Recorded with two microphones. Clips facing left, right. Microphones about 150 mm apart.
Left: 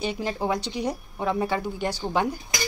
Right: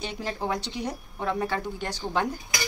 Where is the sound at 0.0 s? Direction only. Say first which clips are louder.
Left 4 dB; 15° left (ahead or behind).